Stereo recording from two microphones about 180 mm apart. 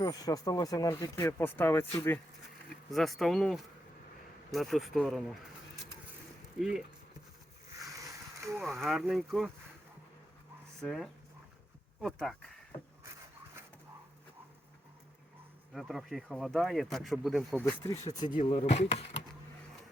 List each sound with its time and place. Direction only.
0.0 s speech: 20° left (ahead or behind)
2.9 s speech: centre (ahead or behind)
6.6 s speech: 5° right (ahead or behind)
7.8 s a sound: 20° right (ahead or behind)
8.6 s speech: centre (ahead or behind)
10.8 s speech: centre (ahead or behind)
15.7 s speech: centre (ahead or behind)
17.6 s speech: 20° left (ahead or behind)
18.4 s speech: 35° left (ahead or behind)